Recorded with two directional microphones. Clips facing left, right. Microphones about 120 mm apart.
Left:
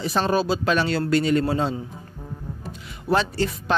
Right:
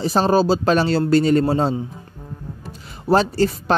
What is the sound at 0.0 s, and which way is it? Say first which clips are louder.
Speech: right 5 dB; 35° right (ahead or behind).